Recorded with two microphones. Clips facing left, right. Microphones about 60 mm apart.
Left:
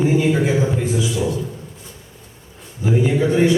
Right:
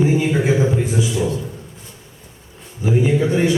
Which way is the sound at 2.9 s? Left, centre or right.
Centre.